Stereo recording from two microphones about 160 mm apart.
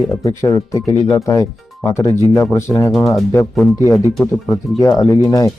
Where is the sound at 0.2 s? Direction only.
20° left (ahead or behind).